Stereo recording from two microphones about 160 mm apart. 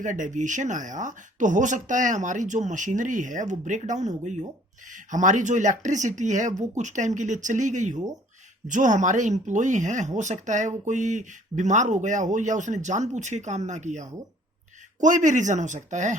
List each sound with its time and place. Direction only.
0.0 s speech: 50° right (ahead or behind)